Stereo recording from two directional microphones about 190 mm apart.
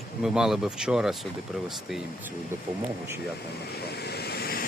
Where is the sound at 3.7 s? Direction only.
60° left (ahead or behind).